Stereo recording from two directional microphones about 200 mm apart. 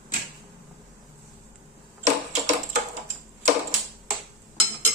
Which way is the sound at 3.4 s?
35° right (ahead or behind).